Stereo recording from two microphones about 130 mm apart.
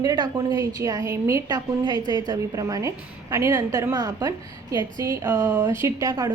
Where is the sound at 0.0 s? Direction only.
30° right (ahead or behind).